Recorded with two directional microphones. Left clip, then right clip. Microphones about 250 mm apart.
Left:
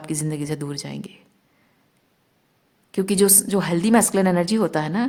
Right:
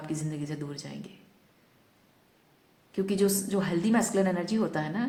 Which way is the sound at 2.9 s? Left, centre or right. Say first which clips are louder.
Left 8 dB; left.